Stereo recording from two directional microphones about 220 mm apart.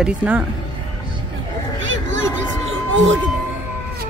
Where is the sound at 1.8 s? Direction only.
60° right (ahead or behind).